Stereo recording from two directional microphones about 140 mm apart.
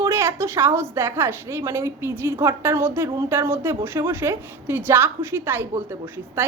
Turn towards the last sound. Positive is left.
turn(degrees=-15)  # may be behind; listen again after turning